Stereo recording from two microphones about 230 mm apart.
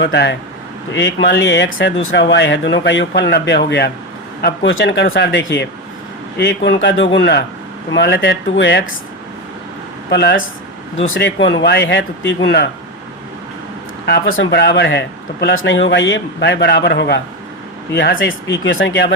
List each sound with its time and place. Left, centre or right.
0.0 s a man's voice: left
10.1 s a man's voice: left
14.3 s a man's voice: left